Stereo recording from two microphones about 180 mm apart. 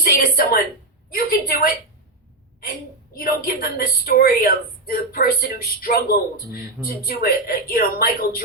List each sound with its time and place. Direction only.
0.0 s a sound: 60° left (ahead or behind)
1.1 s a woman's voice: 60° left (ahead or behind)
3.2 s speech: 55° left (ahead or behind)